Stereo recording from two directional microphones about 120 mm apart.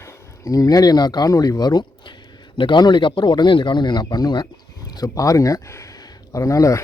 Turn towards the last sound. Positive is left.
turn(degrees=25)  # may be behind; listen again after turning